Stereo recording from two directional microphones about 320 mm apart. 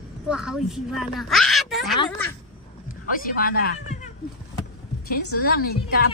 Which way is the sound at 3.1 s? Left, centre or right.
Left.